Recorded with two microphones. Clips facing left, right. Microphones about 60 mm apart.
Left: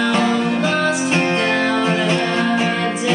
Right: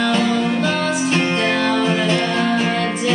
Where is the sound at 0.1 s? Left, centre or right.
Left.